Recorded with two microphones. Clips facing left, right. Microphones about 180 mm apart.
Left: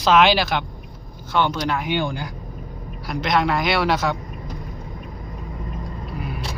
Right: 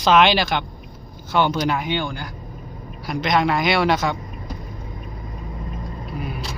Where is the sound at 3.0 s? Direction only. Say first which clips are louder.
Right 1 dB; centre (ahead or behind).